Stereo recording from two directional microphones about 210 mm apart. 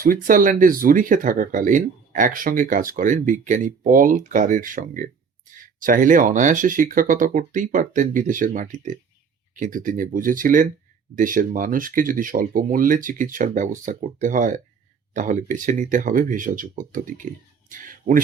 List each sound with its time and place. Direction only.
0.0 s speech: 40° right (ahead or behind)